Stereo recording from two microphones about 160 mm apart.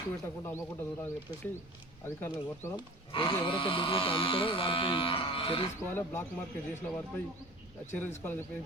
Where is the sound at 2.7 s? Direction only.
30° left (ahead or behind).